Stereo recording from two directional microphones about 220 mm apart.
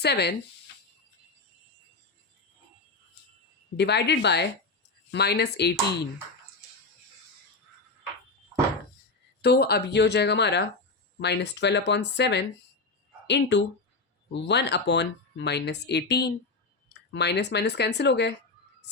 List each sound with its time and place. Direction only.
0.0 s speech: 50° left (ahead or behind)
3.8 s speech: 50° left (ahead or behind)
9.4 s speech: 45° left (ahead or behind)